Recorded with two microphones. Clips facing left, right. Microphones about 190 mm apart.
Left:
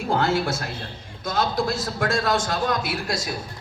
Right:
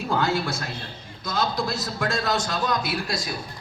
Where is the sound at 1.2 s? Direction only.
50° left (ahead or behind).